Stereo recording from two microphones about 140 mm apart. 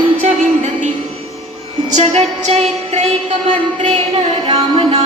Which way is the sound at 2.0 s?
50° right (ahead or behind).